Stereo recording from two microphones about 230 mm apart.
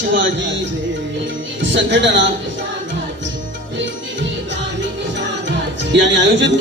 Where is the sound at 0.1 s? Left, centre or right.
Right.